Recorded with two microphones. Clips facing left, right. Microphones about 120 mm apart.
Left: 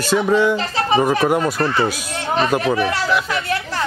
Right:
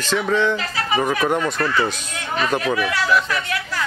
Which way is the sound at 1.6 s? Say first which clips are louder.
Left 2 dB; 35° left (ahead or behind).